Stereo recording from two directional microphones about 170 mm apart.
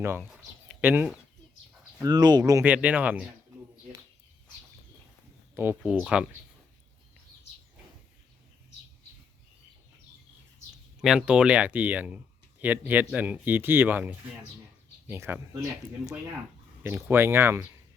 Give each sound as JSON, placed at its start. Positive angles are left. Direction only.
{"t": 0.0, "sound": "speech", "side_deg": -15}
{"t": 2.0, "sound": "speech", "side_deg": -25}
{"t": 5.5, "sound": "speech", "side_deg": -10}
{"t": 11.0, "sound": "speech", "side_deg": -5}